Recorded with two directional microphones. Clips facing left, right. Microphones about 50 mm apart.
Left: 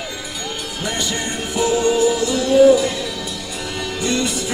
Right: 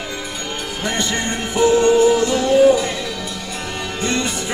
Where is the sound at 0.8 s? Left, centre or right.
Right.